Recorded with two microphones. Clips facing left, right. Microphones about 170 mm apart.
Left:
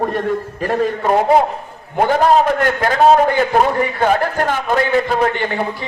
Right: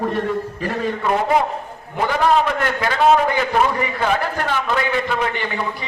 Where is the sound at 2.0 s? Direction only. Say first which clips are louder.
Left 4 dB; 45° left (ahead or behind).